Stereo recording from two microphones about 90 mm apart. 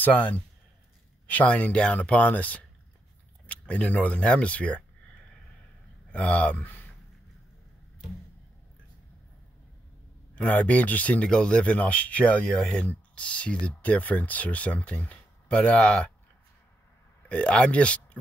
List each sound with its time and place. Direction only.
0.0 s speech: 20° left (ahead or behind)
6.1 s speech: 15° left (ahead or behind)
10.3 s speech: 15° left (ahead or behind)
17.3 s speech: 15° left (ahead or behind)